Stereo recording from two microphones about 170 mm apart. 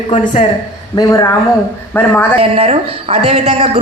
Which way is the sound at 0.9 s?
20° left (ahead or behind).